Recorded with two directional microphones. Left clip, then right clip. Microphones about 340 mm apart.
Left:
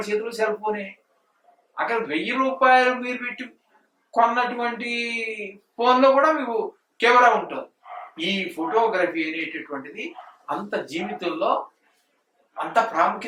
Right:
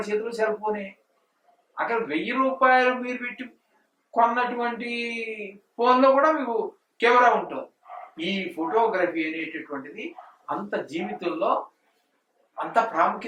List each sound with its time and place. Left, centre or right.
0.0 s a man's voice: centre
12.6 s a man's voice: centre